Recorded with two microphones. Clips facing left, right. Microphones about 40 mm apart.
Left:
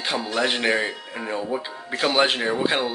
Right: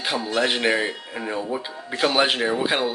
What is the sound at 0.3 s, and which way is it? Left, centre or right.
Speech, centre.